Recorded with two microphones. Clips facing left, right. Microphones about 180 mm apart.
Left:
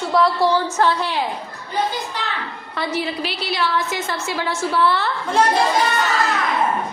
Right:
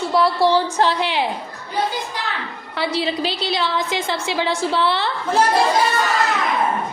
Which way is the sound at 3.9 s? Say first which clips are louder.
Right 2 dB; 90° right.